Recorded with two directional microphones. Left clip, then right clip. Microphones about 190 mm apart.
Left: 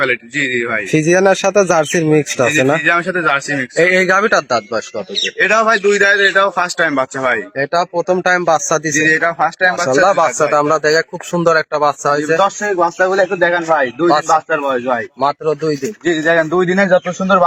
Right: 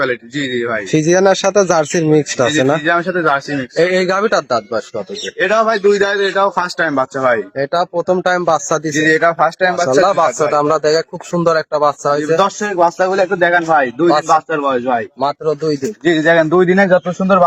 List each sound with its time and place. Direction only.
0.9 s speech: centre (ahead or behind)
5.4 s speech: 15° right (ahead or behind)
6.0 s a man's voice: 25° right (ahead or behind)
7.5 s speech: centre (ahead or behind)
9.0 s a man's voice: 60° right (ahead or behind)
10.0 s speech: centre (ahead or behind)
12.4 s a man's voice: 45° right (ahead or behind); by 14.9 s 20° right (ahead or behind)
15.2 s speech: centre (ahead or behind)
16.0 s a man's voice: 45° right (ahead or behind)
16.9 s speech: 20° right (ahead or behind)